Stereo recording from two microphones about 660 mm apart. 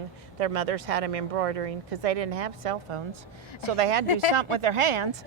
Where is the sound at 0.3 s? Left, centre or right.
Right.